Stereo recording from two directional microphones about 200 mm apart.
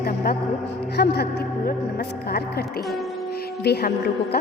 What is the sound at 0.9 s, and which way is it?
Speech, 55° left (ahead or behind).